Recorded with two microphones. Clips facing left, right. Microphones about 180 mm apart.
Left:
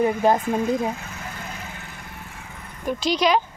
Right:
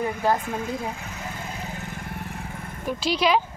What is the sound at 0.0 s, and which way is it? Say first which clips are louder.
Speech: left 5 dB; 20° left (ahead or behind).